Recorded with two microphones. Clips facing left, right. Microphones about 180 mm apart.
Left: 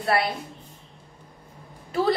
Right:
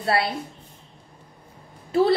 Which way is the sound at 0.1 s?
30° right (ahead or behind).